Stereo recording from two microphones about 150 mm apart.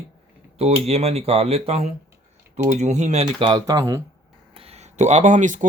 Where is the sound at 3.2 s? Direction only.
30° right (ahead or behind).